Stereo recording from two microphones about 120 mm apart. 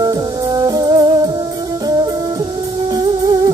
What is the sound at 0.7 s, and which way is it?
Music, 30° right (ahead or behind).